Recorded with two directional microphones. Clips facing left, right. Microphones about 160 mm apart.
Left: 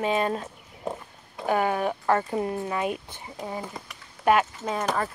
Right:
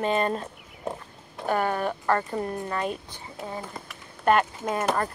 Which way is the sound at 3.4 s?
5° right (ahead or behind).